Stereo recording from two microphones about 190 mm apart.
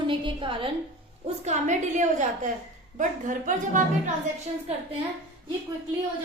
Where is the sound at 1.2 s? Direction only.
35° right (ahead or behind).